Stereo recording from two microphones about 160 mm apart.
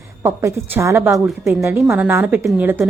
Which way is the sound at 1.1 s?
Centre (ahead or behind).